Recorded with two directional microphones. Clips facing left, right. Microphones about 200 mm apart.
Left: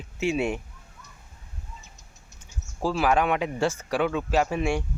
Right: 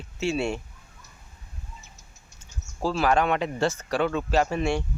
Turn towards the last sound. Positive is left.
turn(degrees=10)  # may be behind; listen again after turning